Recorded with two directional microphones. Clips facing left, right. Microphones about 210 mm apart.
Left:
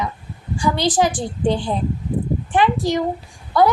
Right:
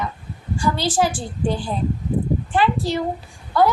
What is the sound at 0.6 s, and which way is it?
A woman's voice, 15° left (ahead or behind).